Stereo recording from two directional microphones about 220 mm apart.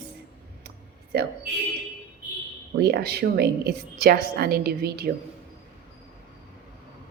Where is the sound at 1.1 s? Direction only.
45° right (ahead or behind).